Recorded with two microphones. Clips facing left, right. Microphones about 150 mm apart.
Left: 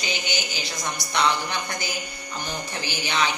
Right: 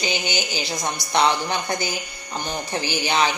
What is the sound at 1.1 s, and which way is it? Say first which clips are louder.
Speech: right 4 dB; 35° right (ahead or behind).